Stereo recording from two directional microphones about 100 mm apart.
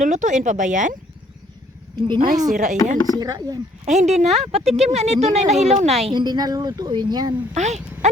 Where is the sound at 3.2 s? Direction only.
40° right (ahead or behind).